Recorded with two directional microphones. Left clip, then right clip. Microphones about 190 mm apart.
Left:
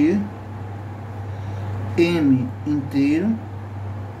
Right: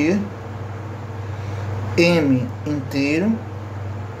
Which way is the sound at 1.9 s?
50° right (ahead or behind).